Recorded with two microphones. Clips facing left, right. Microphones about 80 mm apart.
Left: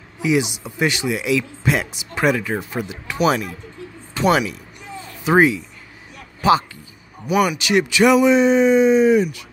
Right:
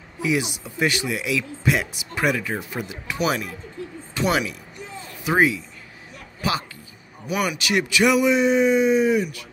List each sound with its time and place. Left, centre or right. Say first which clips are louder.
0.2 s speech: left 4 dB; centre
7.5 s speech: left 4 dB; left